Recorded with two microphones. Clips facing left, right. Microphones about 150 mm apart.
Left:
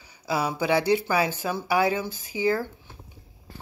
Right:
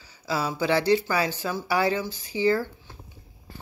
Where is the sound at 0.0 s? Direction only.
15° left (ahead or behind).